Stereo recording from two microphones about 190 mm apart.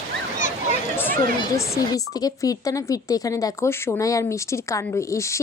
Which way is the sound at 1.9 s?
20° left (ahead or behind).